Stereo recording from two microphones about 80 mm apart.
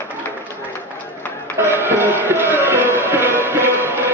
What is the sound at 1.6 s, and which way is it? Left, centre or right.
Music, right.